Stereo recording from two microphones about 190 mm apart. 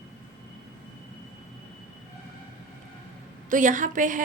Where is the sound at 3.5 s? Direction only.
40° right (ahead or behind).